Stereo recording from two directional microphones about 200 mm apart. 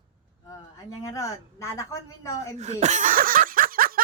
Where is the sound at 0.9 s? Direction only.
15° left (ahead or behind).